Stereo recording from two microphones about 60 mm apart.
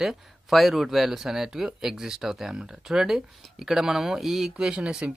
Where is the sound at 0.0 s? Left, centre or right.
Centre.